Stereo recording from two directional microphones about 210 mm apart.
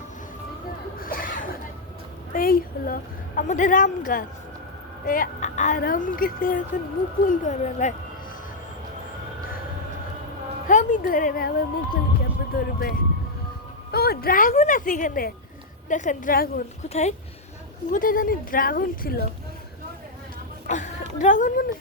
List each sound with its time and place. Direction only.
0.9 s a sound: 40° left (ahead or behind)
2.3 s a woman's voice: 45° left (ahead or behind)
10.7 s a woman's voice: 35° left (ahead or behind)
16.9 s a woman's voice: 30° left (ahead or behind)
20.7 s speech: 35° left (ahead or behind)